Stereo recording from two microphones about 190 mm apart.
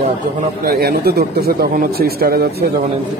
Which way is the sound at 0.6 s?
55° right (ahead or behind).